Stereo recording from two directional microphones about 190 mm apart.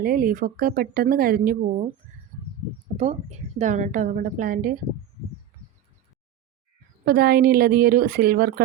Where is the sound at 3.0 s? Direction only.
35° right (ahead or behind).